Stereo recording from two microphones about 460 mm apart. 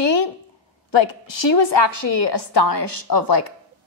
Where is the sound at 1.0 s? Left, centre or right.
Left.